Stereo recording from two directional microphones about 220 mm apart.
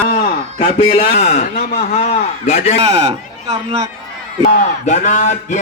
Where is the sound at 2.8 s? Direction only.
30° right (ahead or behind).